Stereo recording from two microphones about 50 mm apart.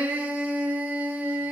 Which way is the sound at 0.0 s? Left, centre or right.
Right.